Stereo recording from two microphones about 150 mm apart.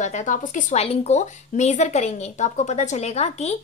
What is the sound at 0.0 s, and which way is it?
Speech, 55° left (ahead or behind).